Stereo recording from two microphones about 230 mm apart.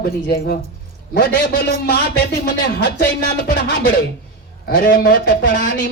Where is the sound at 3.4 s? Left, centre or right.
Left.